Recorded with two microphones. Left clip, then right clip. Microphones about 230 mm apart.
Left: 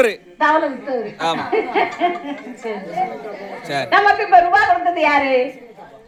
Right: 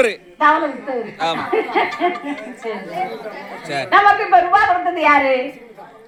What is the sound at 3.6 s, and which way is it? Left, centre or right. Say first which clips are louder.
Speech: left 1 dB; centre.